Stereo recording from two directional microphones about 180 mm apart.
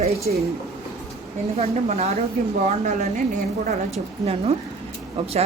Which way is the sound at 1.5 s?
35° right (ahead or behind).